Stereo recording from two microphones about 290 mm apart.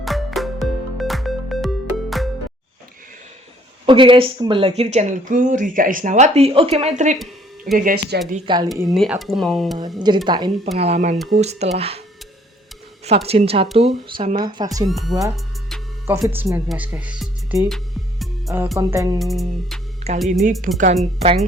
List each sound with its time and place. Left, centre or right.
0.0 s music: centre
3.8 s speech: centre
7.9 s speech: right
8.3 s speech: centre
8.7 s speech: centre
10.2 s speech: centre
13.1 s speech: right
14.8 s speech: centre
19.2 s speech: centre
20.7 s speech: right